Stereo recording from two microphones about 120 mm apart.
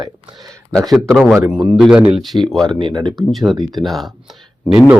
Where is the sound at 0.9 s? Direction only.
Centre (ahead or behind).